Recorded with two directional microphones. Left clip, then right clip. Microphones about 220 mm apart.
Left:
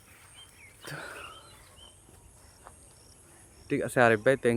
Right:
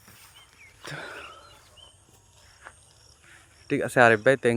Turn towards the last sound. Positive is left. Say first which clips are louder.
# right 4 dB
turn(degrees=-20)  # may be behind; listen again after turning